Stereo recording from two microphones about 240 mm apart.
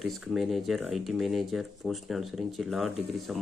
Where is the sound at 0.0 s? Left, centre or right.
Centre.